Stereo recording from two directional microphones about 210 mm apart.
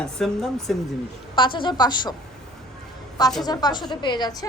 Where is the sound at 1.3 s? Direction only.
25° left (ahead or behind).